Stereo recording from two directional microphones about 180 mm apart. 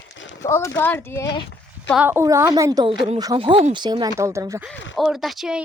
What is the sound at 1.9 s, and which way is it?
A woman's voice, 10° right (ahead or behind).